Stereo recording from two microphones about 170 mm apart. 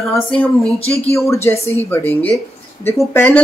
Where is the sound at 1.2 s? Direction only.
15° left (ahead or behind).